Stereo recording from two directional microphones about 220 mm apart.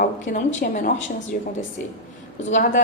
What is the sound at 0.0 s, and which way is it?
A woman's voice, 40° left (ahead or behind).